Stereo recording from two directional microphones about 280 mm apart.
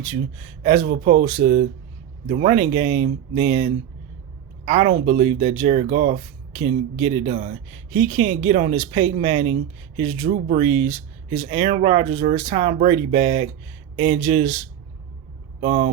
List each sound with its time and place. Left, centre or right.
0.6 s speech: right
15.6 s speech: right